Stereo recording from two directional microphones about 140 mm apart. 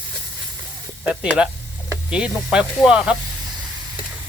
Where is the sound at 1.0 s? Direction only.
10° right (ahead or behind).